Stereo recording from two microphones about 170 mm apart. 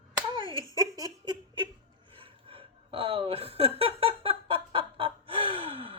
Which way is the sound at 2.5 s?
30° right (ahead or behind).